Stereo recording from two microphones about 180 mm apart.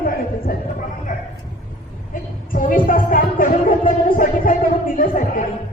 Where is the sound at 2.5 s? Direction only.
50° left (ahead or behind).